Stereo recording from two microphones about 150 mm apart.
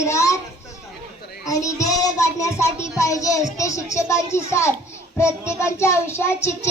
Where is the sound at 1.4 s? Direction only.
20° left (ahead or behind).